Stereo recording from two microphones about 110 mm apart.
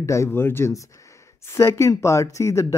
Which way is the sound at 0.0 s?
25° left (ahead or behind).